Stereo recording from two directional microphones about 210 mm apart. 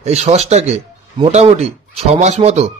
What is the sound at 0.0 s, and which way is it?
A man's voice, 30° right (ahead or behind).